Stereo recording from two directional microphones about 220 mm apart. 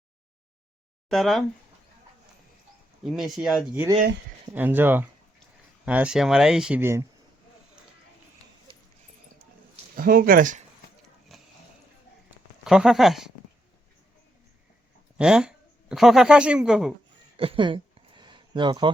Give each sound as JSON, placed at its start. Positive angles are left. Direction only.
{"t": 1.1, "sound": "speech", "side_deg": 0}
{"t": 3.0, "sound": "speech", "side_deg": 0}
{"t": 9.9, "sound": "speech", "side_deg": -40}
{"t": 11.3, "sound": "a sound", "side_deg": 0}
{"t": 12.6, "sound": "speech", "side_deg": 0}
{"t": 15.2, "sound": "speech", "side_deg": -5}
{"t": 17.3, "sound": "a sound", "side_deg": -25}